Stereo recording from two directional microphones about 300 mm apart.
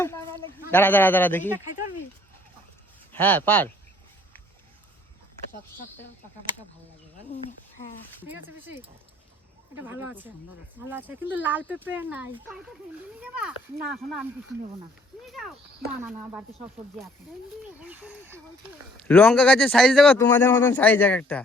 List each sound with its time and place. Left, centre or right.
0.0 s a sound: centre
0.7 s a man's voice: centre
3.1 s a man's voice: centre
8.4 s speech: centre
9.8 s speech: centre
17.7 s speech: centre
19.0 s speech: centre